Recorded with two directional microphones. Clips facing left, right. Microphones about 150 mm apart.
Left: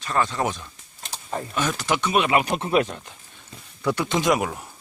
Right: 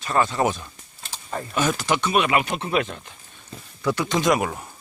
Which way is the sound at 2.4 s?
40° left (ahead or behind).